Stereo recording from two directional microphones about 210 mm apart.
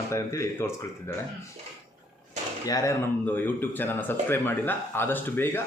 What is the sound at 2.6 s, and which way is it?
Speech, 15° left (ahead or behind).